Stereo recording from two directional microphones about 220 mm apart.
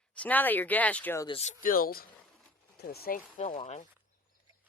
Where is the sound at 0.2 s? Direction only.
10° left (ahead or behind).